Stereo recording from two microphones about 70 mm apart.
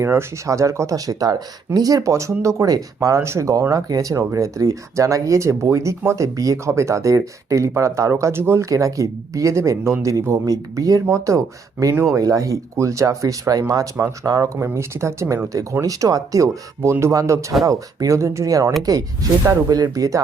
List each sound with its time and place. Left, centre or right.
0.0 s speech: right
3.2 s speech: right
3.6 s speech: right
4.2 s speech: right
8.7 s speech: right
15.8 s speech: right